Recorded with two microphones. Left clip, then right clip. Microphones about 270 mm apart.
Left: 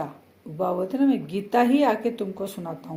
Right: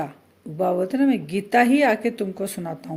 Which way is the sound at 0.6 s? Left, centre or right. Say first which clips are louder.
Right 3 dB; right.